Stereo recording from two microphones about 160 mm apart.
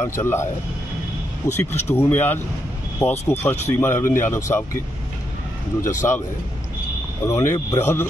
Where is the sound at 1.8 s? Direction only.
15° left (ahead or behind).